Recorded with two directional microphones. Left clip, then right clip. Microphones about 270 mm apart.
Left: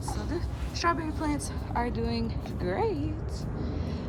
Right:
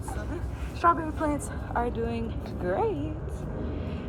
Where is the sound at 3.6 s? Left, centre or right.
Centre.